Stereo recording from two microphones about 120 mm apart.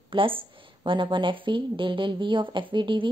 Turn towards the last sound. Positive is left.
turn(degrees=-40)  # may be behind; listen again after turning